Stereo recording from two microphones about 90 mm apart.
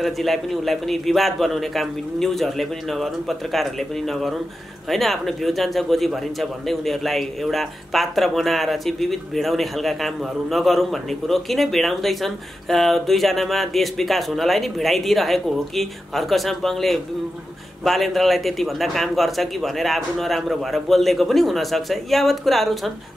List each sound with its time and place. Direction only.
0.0 s a man's voice: centre (ahead or behind)